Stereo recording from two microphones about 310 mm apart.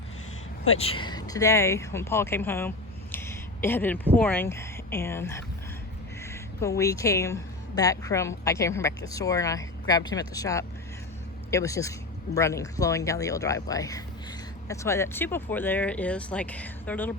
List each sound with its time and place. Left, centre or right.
0.8 s speech: centre